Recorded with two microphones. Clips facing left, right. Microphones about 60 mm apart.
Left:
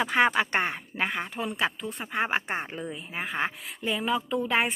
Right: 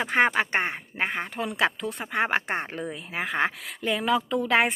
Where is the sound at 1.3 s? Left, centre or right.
Right.